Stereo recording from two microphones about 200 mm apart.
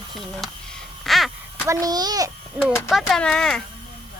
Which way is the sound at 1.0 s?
Centre (ahead or behind).